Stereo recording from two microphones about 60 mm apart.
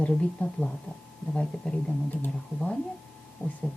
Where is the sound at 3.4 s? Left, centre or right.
Left.